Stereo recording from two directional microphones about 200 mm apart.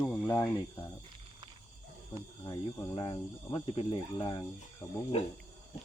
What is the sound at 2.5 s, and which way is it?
Speech, 20° left (ahead or behind).